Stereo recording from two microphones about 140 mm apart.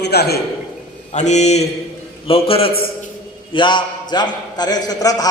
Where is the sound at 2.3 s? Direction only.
45° left (ahead or behind); by 5.2 s 25° left (ahead or behind).